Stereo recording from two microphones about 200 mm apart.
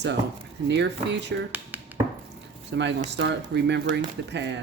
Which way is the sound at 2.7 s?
60° right (ahead or behind).